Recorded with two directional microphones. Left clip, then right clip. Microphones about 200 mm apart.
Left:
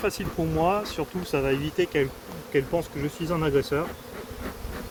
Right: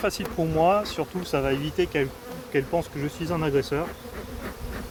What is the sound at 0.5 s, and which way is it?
Speech, 30° right (ahead or behind).